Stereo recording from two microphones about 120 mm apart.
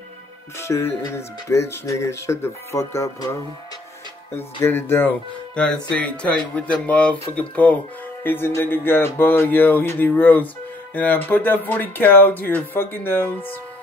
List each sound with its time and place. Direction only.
0.6 s speech: 20° left (ahead or behind)
4.4 s speech: 20° left (ahead or behind)